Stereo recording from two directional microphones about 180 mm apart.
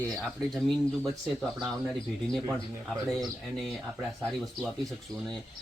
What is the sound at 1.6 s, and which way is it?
Speech, 20° right (ahead or behind).